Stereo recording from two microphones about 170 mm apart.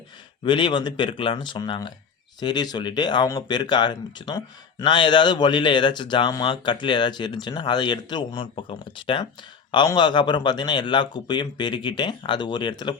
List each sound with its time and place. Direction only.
0.4 s speech: 30° left (ahead or behind)